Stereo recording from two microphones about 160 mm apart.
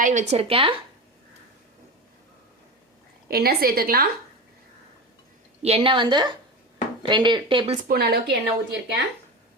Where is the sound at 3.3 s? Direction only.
75° right (ahead or behind).